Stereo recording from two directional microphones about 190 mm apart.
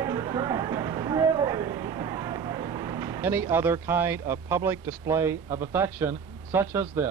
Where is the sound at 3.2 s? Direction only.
10° right (ahead or behind).